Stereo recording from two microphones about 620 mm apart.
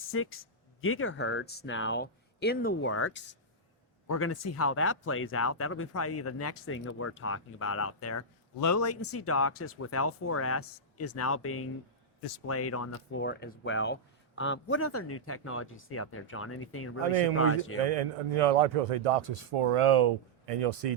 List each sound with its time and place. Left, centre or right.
0.0 s speech: centre
17.8 s a man's voice: right